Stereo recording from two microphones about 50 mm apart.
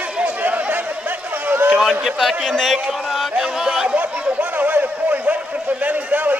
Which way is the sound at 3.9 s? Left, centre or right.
Right.